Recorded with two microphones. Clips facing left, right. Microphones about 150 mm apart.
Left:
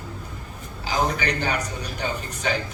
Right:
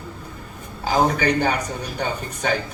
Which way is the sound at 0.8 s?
50° right (ahead or behind).